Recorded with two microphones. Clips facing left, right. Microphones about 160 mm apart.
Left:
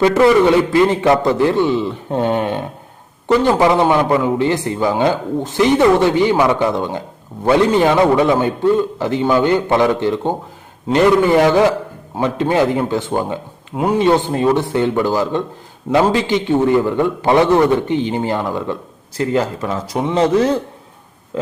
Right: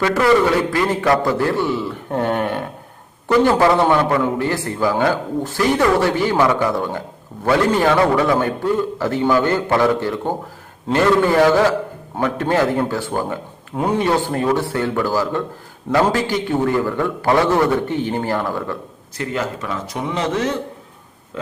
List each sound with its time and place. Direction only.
0.0 s a man's voice: 20° left (ahead or behind)
14.0 s a man's voice: 20° left (ahead or behind)
19.1 s speech: 30° left (ahead or behind)